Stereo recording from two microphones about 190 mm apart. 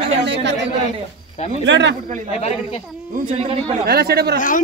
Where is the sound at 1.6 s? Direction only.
70° right (ahead or behind).